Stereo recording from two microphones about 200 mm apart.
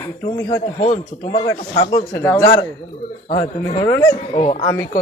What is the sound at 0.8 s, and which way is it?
Speech, 30° left (ahead or behind).